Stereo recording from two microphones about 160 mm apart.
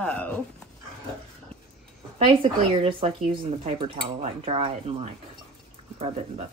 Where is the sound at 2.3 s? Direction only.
35° right (ahead or behind).